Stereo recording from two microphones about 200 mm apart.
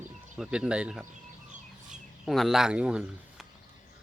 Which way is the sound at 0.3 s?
Centre (ahead or behind).